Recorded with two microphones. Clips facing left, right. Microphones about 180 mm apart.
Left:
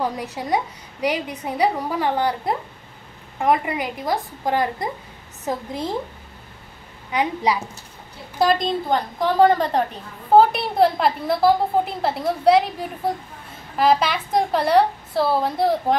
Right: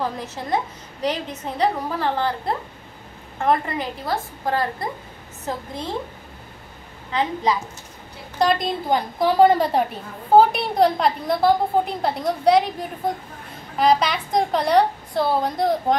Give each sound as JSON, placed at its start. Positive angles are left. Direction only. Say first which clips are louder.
{"t": 0.0, "sound": "a woman's voice", "louder": "left 2 dB", "side_deg": 15}
{"t": 7.1, "sound": "a woman's voice", "louder": "left 1 dB", "side_deg": 15}
{"t": 8.4, "sound": "a woman's voice", "louder": "left 1 dB", "side_deg": 0}
{"t": 10.3, "sound": "a woman's voice", "louder": "even", "side_deg": 0}